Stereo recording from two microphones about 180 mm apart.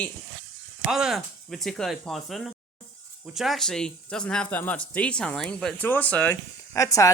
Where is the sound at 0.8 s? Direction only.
Centre (ahead or behind).